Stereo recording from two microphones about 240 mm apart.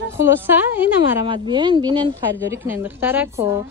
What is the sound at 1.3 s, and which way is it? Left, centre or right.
A woman's voice, centre.